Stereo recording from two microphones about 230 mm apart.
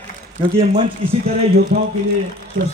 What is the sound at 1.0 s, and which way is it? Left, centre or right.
Speech, right.